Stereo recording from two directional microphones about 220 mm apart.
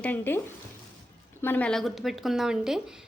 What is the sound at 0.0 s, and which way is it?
A woman's voice, 10° left (ahead or behind).